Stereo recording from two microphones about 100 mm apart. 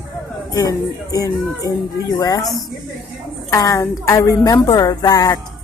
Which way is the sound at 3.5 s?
35° left (ahead or behind).